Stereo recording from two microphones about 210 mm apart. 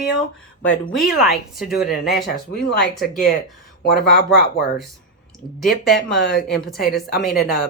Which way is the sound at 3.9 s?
50° left (ahead or behind).